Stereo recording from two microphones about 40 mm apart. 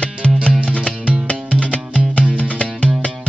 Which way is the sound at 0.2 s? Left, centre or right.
Left.